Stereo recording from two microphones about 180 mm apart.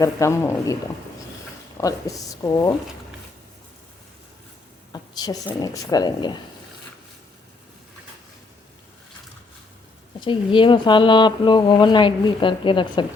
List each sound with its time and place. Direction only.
0.0 s speech: 15° left (ahead or behind)
1.8 s speech: 20° left (ahead or behind)
4.9 s a woman's voice: 25° left (ahead or behind)
10.2 s speech: 25° left (ahead or behind)